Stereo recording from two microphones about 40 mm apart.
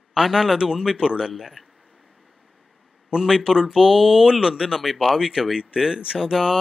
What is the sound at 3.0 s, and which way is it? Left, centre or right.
Speech, centre.